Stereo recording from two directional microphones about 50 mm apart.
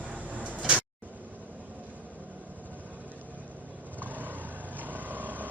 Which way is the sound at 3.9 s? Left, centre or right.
Right.